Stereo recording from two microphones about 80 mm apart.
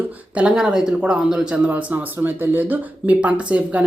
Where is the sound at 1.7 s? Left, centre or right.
Right.